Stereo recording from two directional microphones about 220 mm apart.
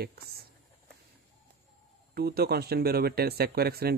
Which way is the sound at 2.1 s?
45° right (ahead or behind).